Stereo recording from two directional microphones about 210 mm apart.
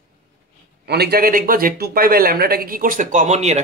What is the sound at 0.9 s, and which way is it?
Speech, 50° right (ahead or behind).